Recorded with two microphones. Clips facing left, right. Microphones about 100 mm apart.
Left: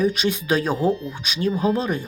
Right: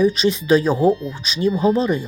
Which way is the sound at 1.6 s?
5° left (ahead or behind).